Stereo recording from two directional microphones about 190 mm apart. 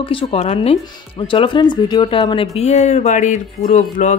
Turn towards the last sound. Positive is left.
turn(degrees=40)  # may be behind; listen again after turning